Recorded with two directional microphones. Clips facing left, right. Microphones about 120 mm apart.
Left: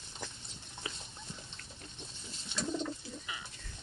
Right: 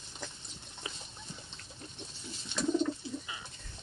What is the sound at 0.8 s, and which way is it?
Dog, 20° right (ahead or behind).